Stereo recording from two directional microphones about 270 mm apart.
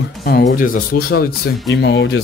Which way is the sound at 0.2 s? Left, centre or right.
Left.